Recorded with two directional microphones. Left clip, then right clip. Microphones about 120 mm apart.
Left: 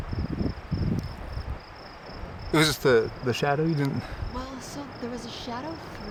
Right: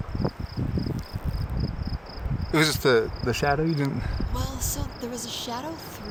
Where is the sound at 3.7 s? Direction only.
Centre (ahead or behind).